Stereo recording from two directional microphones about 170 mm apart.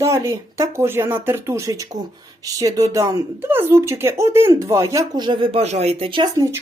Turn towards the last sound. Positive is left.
turn(degrees=-30)  # may be behind; listen again after turning